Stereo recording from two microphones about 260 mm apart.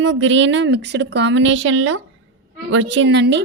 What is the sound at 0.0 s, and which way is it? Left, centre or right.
Speech, right.